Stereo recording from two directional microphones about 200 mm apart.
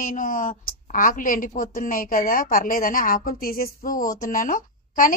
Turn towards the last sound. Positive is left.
turn(degrees=45)  # may be behind; listen again after turning